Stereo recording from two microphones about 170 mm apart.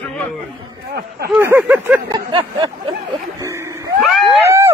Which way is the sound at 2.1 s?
25° right (ahead or behind).